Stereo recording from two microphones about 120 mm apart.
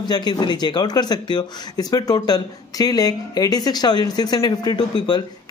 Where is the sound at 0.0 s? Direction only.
35° left (ahead or behind).